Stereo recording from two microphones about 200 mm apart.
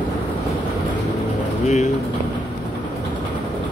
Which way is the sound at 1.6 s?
35° left (ahead or behind).